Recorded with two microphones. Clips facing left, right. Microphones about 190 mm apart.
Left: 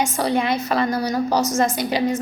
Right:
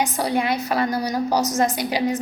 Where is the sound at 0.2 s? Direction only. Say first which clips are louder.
Left 3 dB; 10° right (ahead or behind).